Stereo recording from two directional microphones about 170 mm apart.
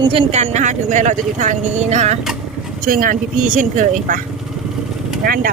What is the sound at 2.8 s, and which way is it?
Speech, 55° right (ahead or behind).